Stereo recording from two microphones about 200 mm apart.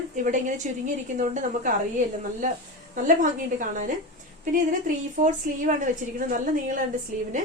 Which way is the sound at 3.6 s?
40° right (ahead or behind).